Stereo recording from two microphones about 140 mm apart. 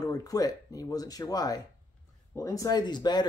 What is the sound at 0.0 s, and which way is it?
Speech, 25° left (ahead or behind).